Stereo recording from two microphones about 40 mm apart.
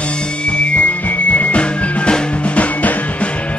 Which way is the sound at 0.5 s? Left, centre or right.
Left.